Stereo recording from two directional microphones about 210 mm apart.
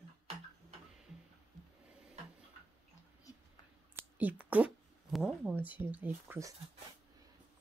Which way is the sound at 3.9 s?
10° right (ahead or behind).